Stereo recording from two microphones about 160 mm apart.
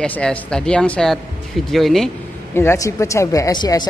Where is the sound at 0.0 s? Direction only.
10° left (ahead or behind).